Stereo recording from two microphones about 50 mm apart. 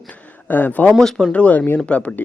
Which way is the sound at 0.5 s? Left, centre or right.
Left.